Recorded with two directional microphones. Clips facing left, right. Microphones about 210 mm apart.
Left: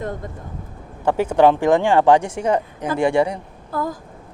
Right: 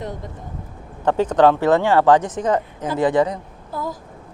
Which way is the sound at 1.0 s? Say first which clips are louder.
Even; 10° left (ahead or behind).